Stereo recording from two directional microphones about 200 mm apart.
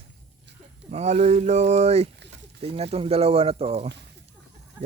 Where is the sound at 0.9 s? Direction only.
30° right (ahead or behind).